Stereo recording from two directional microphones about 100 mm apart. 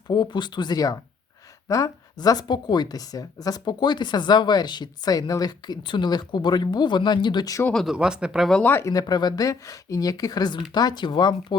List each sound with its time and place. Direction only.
0.1 s speech: 50° left (ahead or behind)
7.7 s speech: 5° left (ahead or behind)
7.9 s speech: 10° right (ahead or behind)
8.6 s speech: 20° left (ahead or behind)
8.9 s speech: 40° left (ahead or behind)